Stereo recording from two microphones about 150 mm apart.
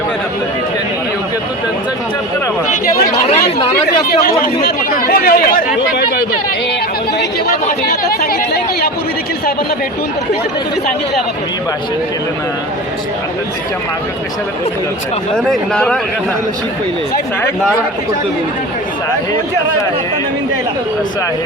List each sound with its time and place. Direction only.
3.2 s speech: 40° left (ahead or behind)
3.8 s speech: 85° left
7.9 s chatter: 85° left
15.4 s speech: 5° left (ahead or behind)